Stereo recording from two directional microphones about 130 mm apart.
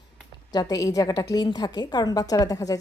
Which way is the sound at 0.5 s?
30° left (ahead or behind).